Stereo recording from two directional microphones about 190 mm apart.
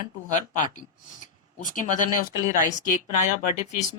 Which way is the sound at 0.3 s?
40° left (ahead or behind).